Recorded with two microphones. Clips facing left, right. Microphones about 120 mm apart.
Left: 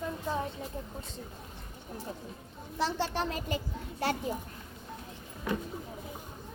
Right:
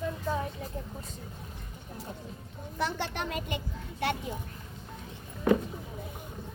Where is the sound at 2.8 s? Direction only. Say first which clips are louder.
Left 2 dB; 30° left (ahead or behind).